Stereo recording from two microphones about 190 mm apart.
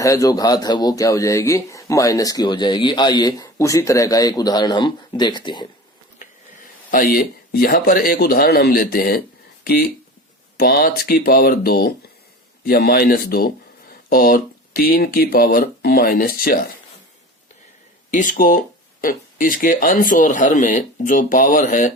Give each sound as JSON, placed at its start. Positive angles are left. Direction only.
{"t": 0.0, "sound": "speech", "side_deg": 15}
{"t": 6.1, "sound": "speech", "side_deg": 45}
{"t": 10.6, "sound": "a man's voice", "side_deg": 50}
{"t": 18.1, "sound": "a man's voice", "side_deg": 45}